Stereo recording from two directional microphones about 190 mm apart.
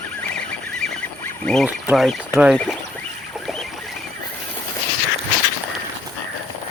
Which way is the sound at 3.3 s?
Centre (ahead or behind).